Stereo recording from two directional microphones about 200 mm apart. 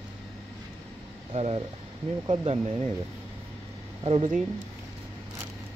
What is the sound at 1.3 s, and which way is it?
Speech, 30° right (ahead or behind).